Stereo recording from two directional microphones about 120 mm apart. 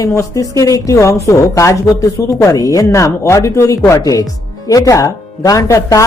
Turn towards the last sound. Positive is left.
turn(degrees=25)  # may be behind; listen again after turning